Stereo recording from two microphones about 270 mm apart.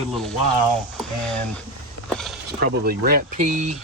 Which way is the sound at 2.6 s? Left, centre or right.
Right.